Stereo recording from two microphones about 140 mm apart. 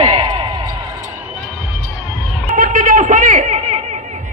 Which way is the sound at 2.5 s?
70° right (ahead or behind).